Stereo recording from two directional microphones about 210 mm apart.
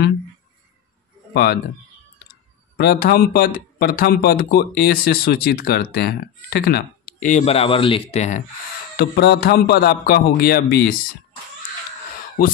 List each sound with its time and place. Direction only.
1.3 s speech: 50° left (ahead or behind)
2.8 s speech: 50° left (ahead or behind)
8.9 s speech: 50° left (ahead or behind)